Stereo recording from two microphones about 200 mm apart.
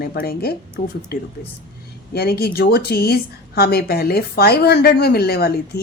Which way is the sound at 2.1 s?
50° left (ahead or behind).